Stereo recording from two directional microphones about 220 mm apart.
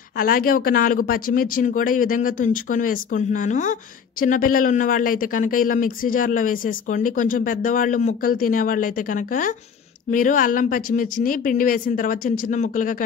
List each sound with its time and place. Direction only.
0.2 s speech: 40° left (ahead or behind)